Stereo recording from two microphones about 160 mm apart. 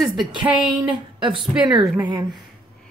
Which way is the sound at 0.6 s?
30° right (ahead or behind).